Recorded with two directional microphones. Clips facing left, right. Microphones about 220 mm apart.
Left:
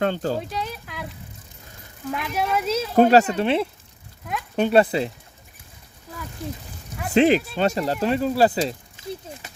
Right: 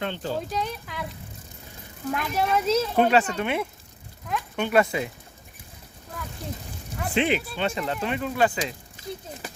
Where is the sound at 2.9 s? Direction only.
40° left (ahead or behind).